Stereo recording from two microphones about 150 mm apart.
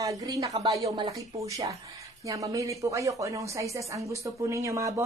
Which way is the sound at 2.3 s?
20° right (ahead or behind).